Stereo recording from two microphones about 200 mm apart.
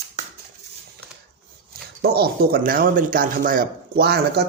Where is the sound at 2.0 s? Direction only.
50° right (ahead or behind).